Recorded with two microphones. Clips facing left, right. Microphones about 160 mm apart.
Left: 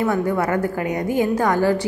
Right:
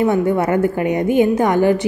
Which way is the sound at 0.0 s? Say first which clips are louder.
Right 4 dB; 20° right (ahead or behind).